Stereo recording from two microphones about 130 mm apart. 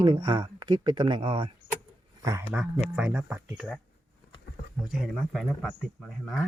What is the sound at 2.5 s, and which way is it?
Speech, 10° right (ahead or behind).